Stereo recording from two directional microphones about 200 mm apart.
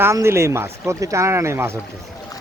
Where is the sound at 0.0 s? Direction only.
15° right (ahead or behind).